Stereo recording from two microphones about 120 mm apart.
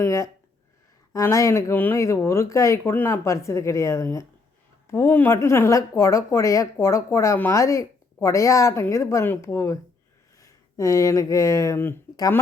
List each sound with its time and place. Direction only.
0.0 s speech: 25° left (ahead or behind)